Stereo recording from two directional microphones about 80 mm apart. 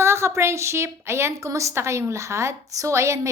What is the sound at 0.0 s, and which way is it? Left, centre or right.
A woman's voice, right.